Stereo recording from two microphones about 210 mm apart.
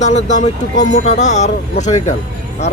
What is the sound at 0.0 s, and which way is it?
Speech, 35° left (ahead or behind).